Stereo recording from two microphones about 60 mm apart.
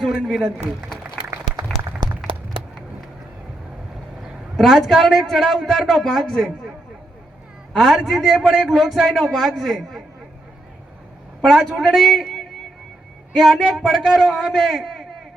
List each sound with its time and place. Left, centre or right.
0.1 s a man's voice: centre
4.5 s a man's voice: centre
7.8 s a man's voice: centre
11.4 s a man's voice: centre
13.3 s a man's voice: centre